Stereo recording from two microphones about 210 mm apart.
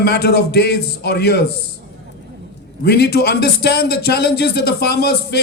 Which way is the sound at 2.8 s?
50° left (ahead or behind).